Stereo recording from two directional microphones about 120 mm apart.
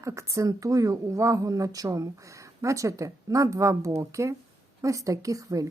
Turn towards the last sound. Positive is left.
turn(degrees=-30)  # may be behind; listen again after turning